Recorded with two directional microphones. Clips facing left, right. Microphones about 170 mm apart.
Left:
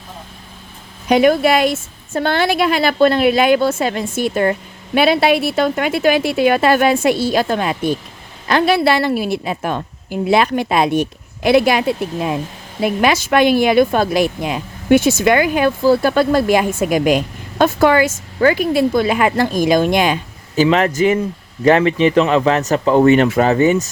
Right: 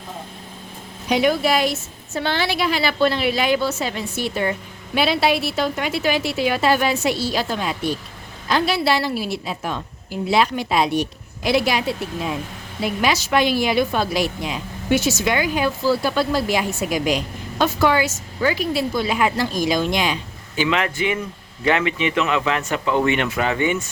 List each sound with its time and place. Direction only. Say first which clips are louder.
1.0 s a woman's voice: left 6 dB; 50° left (ahead or behind)
20.6 s speech: left 8 dB; 40° left (ahead or behind)